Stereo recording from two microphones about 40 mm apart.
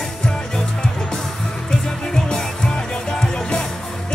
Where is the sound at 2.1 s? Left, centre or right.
Centre.